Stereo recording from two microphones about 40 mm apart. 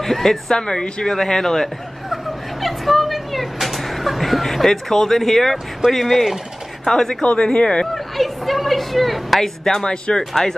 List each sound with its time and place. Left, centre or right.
0.0 s speech: centre
0.6 s speech: left
2.0 s a sound: centre
5.9 s speech: centre; by 7.8 s left
7.8 s a sound: centre
9.8 s speech: left